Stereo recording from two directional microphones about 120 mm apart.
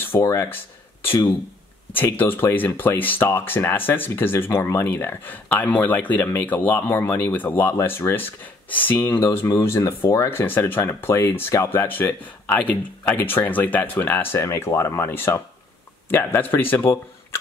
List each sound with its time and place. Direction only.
0.0 s speech: 20° left (ahead or behind)